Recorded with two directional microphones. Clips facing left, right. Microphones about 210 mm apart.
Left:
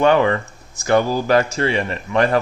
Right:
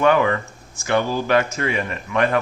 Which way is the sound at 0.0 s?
30° left (ahead or behind).